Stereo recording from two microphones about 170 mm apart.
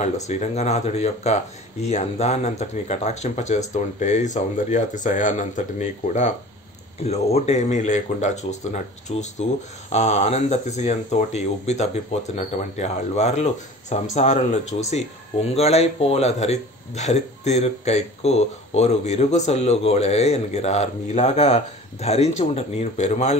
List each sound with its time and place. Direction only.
0.0 s speech: 40° left (ahead or behind)